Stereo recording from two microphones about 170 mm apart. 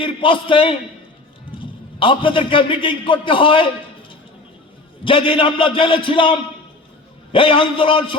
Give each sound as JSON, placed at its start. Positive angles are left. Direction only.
{"t": 0.0, "sound": "a man's voice", "side_deg": 30}
{"t": 5.0, "sound": "a man's voice", "side_deg": 30}